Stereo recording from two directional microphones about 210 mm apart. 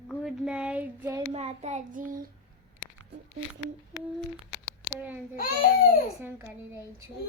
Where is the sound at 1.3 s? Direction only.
30° right (ahead or behind).